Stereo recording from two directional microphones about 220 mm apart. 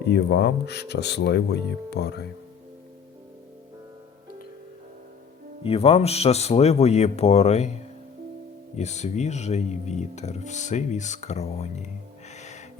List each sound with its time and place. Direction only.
0.0 s speech: 50° left (ahead or behind)
5.6 s speech: 25° left (ahead or behind)
8.7 s speech: 30° left (ahead or behind)
12.3 s music: 30° left (ahead or behind)